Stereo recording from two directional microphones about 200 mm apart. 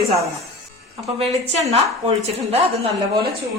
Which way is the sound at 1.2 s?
30° right (ahead or behind).